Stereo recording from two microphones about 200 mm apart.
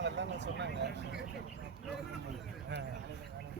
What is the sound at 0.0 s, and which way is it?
Vehicle, 60° right (ahead or behind).